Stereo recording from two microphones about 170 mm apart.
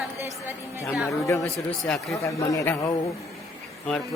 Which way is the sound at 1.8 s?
Centre (ahead or behind).